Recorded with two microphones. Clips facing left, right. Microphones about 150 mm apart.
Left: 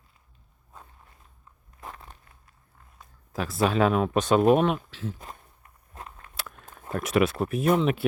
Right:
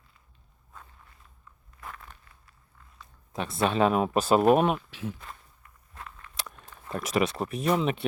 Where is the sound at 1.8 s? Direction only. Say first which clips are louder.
Left 1 dB; 35° left (ahead or behind).